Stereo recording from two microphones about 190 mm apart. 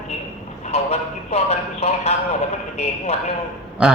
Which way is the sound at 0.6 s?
35° left (ahead or behind).